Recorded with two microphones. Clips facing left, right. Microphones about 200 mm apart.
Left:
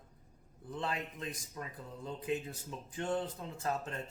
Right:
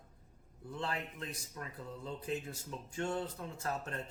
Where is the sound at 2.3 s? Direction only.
15° left (ahead or behind).